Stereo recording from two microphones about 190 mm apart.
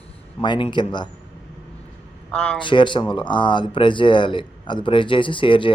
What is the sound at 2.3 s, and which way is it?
Speech, 5° left (ahead or behind).